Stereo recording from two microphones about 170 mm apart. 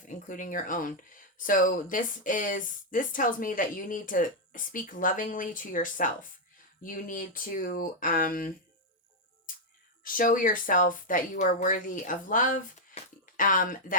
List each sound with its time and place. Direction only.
0.1 s speech: 50° left (ahead or behind)
9.5 s a sound: 55° left (ahead or behind)
10.0 s speech: 55° left (ahead or behind)